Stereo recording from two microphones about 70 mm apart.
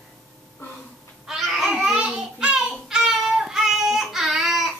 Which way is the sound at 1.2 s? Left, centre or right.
Centre.